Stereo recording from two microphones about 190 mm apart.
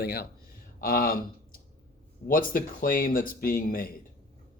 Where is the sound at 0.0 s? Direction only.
55° left (ahead or behind).